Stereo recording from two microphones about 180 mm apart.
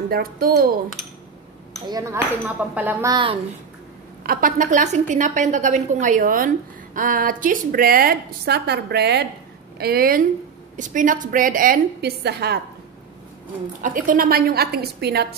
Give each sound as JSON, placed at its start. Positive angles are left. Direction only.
{"t": 0.1, "sound": "a woman's voice", "side_deg": -55}
{"t": 1.9, "sound": "speech", "side_deg": -20}
{"t": 3.1, "sound": "a woman's voice", "side_deg": -25}
{"t": 4.2, "sound": "a woman's voice", "side_deg": -50}
{"t": 10.8, "sound": "a woman's voice", "side_deg": -45}
{"t": 13.8, "sound": "a woman's voice", "side_deg": -50}